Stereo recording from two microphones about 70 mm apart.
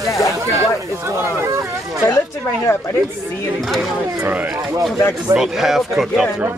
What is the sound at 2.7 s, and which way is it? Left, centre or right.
Speech, left.